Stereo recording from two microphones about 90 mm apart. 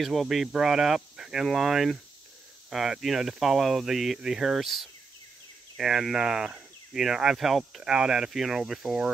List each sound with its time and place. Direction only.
0.0 s speech: centre (ahead or behind)